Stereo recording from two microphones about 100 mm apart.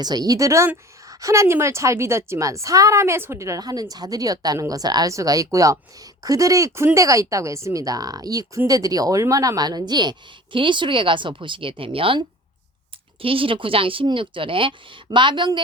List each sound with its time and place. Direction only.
0.0 s a woman's voice: 40° right (ahead or behind); by 12.2 s 60° right (ahead or behind)
13.2 s speech: 65° right (ahead or behind)